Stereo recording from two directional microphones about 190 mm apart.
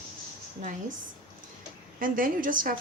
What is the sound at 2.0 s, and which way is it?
Speech, 45° right (ahead or behind).